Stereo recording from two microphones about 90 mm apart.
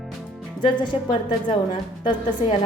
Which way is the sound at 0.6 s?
60° left (ahead or behind).